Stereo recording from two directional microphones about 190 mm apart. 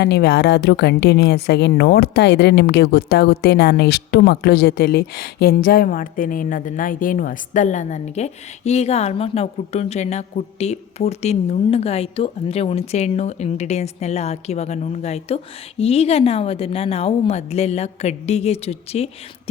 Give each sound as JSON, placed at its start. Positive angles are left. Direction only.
{"t": 0.0, "sound": "a woman's voice", "side_deg": 60}